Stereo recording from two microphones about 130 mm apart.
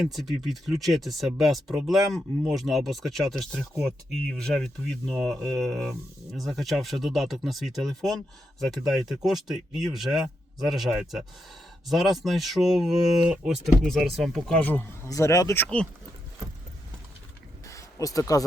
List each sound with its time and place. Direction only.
0.0 s speech: centre (ahead or behind)
14.7 s speech: 15° left (ahead or behind)
15.1 s speech: 25° left (ahead or behind)
17.7 s a sound: 25° left (ahead or behind)